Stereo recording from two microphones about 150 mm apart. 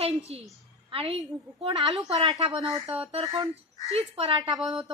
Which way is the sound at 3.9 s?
40° right (ahead or behind).